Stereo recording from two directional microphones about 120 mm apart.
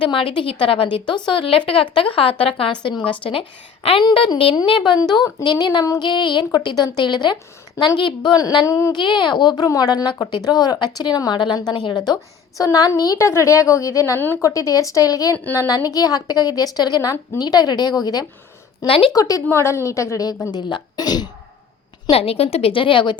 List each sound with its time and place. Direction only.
0.0 s a woman's voice: 45° left (ahead or behind)
4.9 s speech: 35° left (ahead or behind)
9.0 s speech: 40° left (ahead or behind)
18.9 s a woman's voice: 50° left (ahead or behind)
19.1 s speech: 30° left (ahead or behind)
22.1 s a woman's voice: 55° left (ahead or behind)